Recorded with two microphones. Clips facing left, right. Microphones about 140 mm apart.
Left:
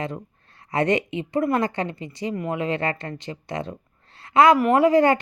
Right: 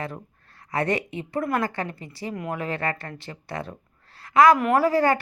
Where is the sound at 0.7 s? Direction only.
20° left (ahead or behind).